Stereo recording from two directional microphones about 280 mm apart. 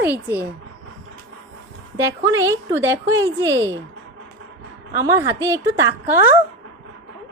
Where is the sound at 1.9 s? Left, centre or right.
Centre.